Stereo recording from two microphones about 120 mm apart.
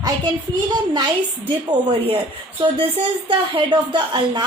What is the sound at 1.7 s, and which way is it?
Speech, 50° right (ahead or behind).